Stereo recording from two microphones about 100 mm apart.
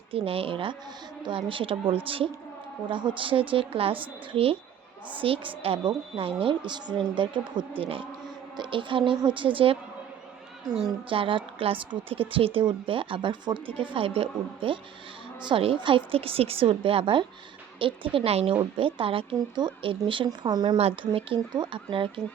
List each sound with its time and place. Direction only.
0.1 s speech: 70° right (ahead or behind)
6.7 s a woman's voice: 50° right (ahead or behind)
7.8 s speech: 65° right (ahead or behind)
8.5 s speech: 55° right (ahead or behind)
11.1 s speech: 60° right (ahead or behind); by 18.5 s 80° right
18.5 s speech: 60° right (ahead or behind)
20.7 s speech: 75° right (ahead or behind)
21.5 s speech: 50° right (ahead or behind)